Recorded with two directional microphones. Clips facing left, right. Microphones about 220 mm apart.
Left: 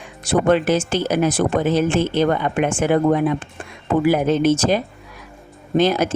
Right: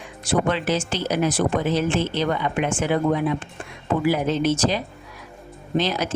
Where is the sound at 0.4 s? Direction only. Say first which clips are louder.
Left 6 dB; 50° left (ahead or behind).